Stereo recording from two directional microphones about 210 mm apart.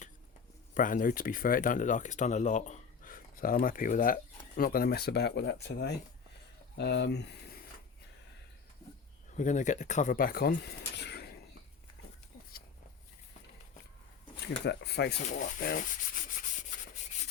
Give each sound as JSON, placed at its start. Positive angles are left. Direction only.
{"t": 0.7, "sound": "speech", "side_deg": 40}
{"t": 9.3, "sound": "speech", "side_deg": 35}
{"t": 14.4, "sound": "speech", "side_deg": 55}
{"t": 15.2, "sound": "speech", "side_deg": 40}